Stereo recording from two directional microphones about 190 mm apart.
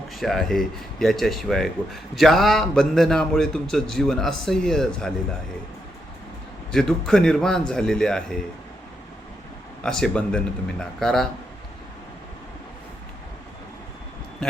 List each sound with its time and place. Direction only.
0.1 s speech: centre (ahead or behind)
6.7 s speech: centre (ahead or behind)
9.8 s speech: 5° left (ahead or behind)